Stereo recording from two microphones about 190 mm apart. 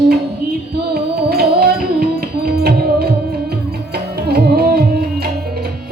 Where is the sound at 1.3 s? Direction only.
55° right (ahead or behind).